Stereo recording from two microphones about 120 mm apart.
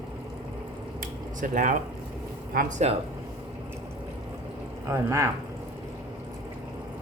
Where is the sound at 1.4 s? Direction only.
90° right.